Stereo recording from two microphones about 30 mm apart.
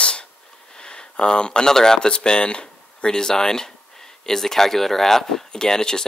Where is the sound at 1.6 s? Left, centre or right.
Centre.